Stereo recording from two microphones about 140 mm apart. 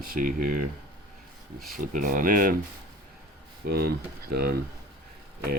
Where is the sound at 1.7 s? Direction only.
70° right (ahead or behind).